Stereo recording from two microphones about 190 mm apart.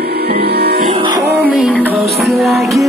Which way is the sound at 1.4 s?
5° right (ahead or behind).